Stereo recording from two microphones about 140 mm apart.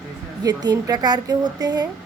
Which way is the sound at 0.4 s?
30° right (ahead or behind).